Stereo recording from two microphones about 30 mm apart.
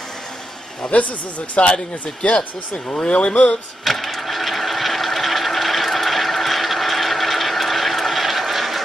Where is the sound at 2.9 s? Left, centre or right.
Left.